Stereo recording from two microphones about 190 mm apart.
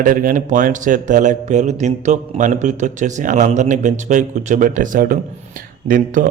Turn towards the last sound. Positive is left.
turn(degrees=-50)  # may be behind; listen again after turning